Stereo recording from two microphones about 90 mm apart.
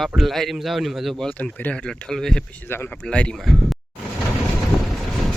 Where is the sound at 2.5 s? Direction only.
25° left (ahead or behind).